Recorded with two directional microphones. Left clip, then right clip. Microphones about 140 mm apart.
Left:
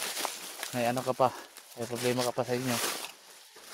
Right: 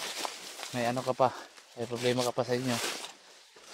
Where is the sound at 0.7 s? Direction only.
5° left (ahead or behind).